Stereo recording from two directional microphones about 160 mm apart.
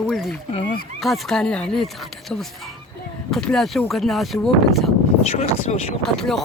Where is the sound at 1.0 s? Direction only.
Centre (ahead or behind).